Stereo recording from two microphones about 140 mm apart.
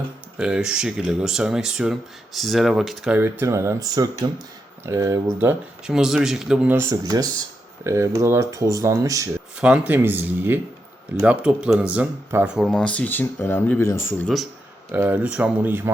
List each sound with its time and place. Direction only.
0.3 s speech: 5° right (ahead or behind)
3.2 s speech: 15° right (ahead or behind)
5.9 s speech: 5° right (ahead or behind)
6.7 s speech: 25° right (ahead or behind)
9.6 s speech: 10° right (ahead or behind)
12.6 s speech: 5° left (ahead or behind)
14.9 s speech: 10° right (ahead or behind)